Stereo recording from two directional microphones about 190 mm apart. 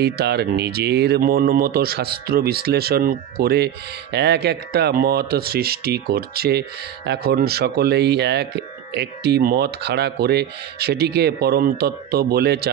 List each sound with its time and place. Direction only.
0.0 s speech: 60° right (ahead or behind)